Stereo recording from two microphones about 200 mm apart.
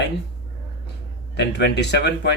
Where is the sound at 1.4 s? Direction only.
60° left (ahead or behind).